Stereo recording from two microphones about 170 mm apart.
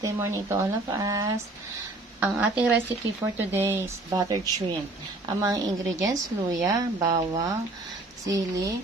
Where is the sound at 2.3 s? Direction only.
10° right (ahead or behind).